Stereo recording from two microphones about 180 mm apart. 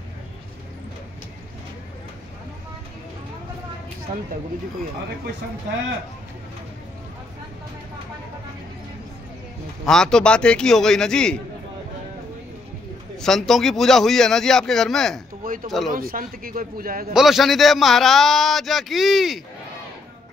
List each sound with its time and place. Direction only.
9.8 s a man's voice: 5° left (ahead or behind)
13.2 s a man's voice: centre (ahead or behind)
15.4 s a man's voice: 50° right (ahead or behind)
17.1 s a man's voice: centre (ahead or behind)